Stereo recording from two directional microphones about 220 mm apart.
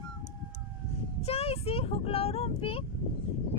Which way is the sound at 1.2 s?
25° left (ahead or behind).